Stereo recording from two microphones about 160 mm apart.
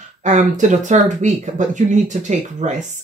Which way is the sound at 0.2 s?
50° right (ahead or behind).